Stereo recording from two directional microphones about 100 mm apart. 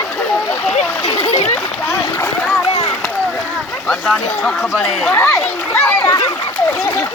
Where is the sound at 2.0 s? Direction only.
30° left (ahead or behind).